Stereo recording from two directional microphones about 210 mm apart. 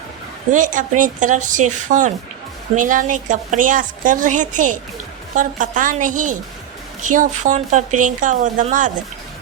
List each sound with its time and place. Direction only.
0.5 s speech: 40° right (ahead or behind)